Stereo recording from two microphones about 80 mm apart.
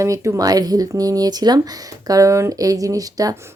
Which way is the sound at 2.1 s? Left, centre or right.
Right.